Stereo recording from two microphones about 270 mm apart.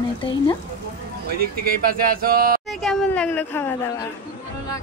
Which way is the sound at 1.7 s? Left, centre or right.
Right.